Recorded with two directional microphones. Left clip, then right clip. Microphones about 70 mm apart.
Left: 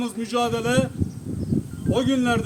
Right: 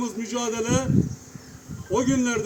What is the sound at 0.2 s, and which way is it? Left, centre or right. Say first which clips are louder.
Speech: left 6 dB; centre.